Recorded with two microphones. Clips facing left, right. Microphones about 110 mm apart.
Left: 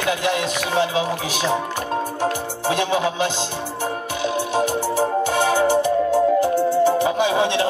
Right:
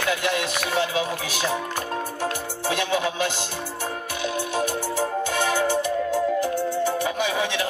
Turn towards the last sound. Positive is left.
turn(degrees=20)  # may be behind; listen again after turning